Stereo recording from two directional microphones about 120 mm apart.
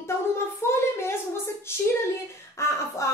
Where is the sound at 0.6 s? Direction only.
20° left (ahead or behind).